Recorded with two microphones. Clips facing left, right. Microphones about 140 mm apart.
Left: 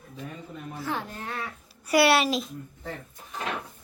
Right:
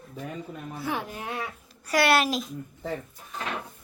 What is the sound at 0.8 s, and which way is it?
Speech, 10° right (ahead or behind).